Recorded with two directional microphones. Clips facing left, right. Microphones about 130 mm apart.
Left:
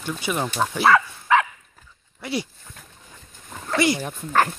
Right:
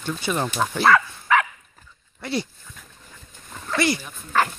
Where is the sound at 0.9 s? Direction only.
25° left (ahead or behind).